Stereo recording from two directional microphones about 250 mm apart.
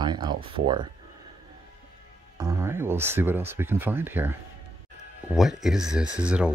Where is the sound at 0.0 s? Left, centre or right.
Centre.